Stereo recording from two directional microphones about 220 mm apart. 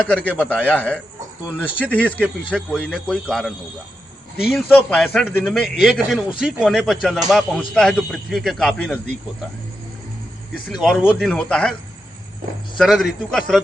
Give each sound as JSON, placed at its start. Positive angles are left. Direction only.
{"t": 0.0, "sound": "a man's voice", "side_deg": 5}
{"t": 4.5, "sound": "a man's voice", "side_deg": 5}
{"t": 10.7, "sound": "a man's voice", "side_deg": 0}
{"t": 12.7, "sound": "a man's voice", "side_deg": 0}